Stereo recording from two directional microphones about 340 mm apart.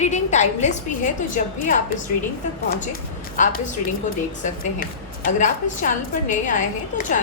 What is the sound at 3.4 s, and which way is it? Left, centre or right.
A woman's voice, left.